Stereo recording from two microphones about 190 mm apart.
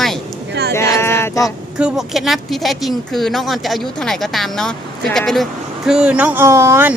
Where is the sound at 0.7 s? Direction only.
15° left (ahead or behind).